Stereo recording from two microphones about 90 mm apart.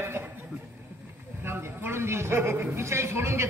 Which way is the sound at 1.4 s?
25° right (ahead or behind).